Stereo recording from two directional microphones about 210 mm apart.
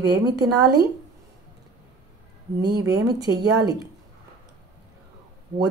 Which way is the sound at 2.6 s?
20° right (ahead or behind).